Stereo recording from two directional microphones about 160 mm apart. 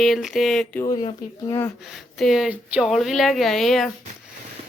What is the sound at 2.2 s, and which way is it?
Speech, centre (ahead or behind).